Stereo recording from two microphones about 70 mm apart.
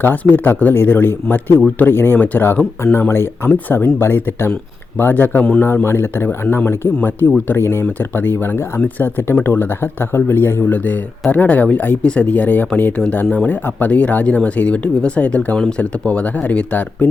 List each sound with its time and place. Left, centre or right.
0.0 s a man's voice: left
5.4 s a man's voice: centre
5.6 s a man's voice: left